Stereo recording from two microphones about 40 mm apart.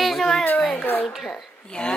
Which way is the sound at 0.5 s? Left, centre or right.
Left.